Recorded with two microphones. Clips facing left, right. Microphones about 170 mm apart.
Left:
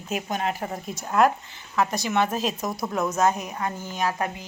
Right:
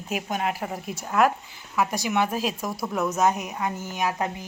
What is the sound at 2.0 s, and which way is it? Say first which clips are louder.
Speech: left 1 dB; 10° right (ahead or behind).